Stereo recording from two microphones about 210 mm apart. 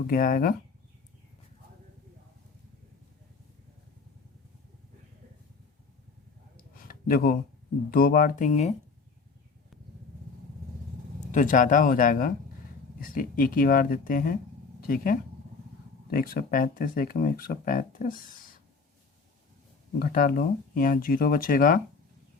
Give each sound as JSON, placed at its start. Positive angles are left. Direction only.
{"t": 0.1, "sound": "speech", "side_deg": 45}
{"t": 6.7, "sound": "a sound", "side_deg": 45}
{"t": 7.9, "sound": "speech", "side_deg": 45}
{"t": 11.3, "sound": "speech", "side_deg": 40}
{"t": 20.0, "sound": "speech", "side_deg": 45}